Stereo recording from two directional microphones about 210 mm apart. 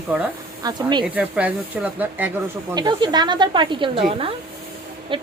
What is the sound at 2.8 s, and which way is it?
Speech, 20° right (ahead or behind).